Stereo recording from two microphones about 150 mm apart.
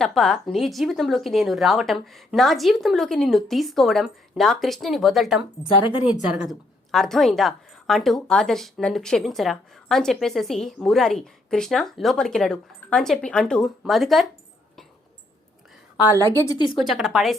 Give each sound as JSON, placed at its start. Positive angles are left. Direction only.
{"t": 0.0, "sound": "a woman's voice", "side_deg": 0}
{"t": 16.1, "sound": "speech", "side_deg": 15}
{"t": 16.6, "sound": "speech", "side_deg": 30}
{"t": 16.8, "sound": "a woman's voice", "side_deg": 0}